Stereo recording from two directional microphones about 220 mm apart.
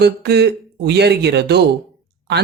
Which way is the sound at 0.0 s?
50° right (ahead or behind).